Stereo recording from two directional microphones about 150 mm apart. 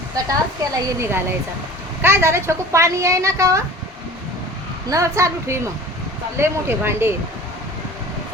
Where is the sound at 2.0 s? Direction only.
15° right (ahead or behind).